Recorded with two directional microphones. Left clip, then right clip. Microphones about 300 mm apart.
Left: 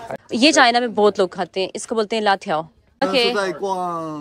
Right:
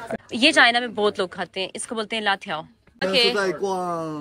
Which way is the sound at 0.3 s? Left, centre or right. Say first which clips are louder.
Left 3 dB; centre.